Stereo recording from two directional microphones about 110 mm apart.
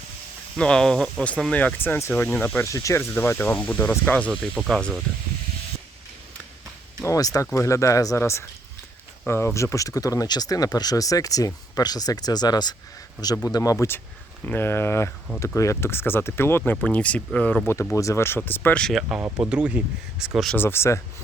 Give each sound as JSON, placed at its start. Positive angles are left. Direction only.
{"t": 0.5, "sound": "speech", "side_deg": 5}
{"t": 2.6, "sound": "speech", "side_deg": 30}
{"t": 7.0, "sound": "speech", "side_deg": 30}
{"t": 17.9, "sound": "speech", "side_deg": 25}
{"t": 18.8, "sound": "speech", "side_deg": 5}
{"t": 19.4, "sound": "speech", "side_deg": -10}
{"t": 20.6, "sound": "speech", "side_deg": 20}